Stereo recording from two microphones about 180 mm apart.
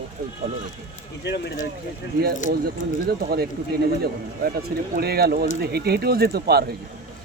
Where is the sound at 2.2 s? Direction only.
60° right (ahead or behind).